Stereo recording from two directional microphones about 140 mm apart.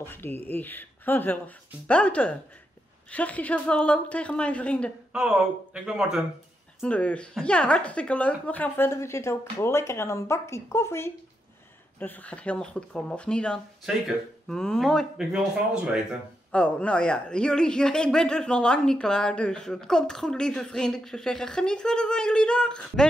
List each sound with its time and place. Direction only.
0.0 s speech: 15° left (ahead or behind)
5.1 s a man's voice: 5° right (ahead or behind)
6.8 s a man's voice: 10° left (ahead or behind)
16.5 s a man's voice: 10° left (ahead or behind)